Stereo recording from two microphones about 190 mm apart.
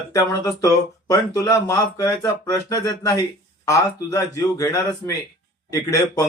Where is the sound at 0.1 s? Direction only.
15° left (ahead or behind).